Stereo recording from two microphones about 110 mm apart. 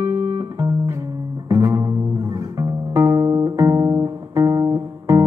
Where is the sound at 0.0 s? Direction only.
25° right (ahead or behind).